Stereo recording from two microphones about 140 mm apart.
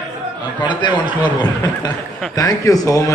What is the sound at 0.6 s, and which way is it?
A man's voice, 30° left (ahead or behind).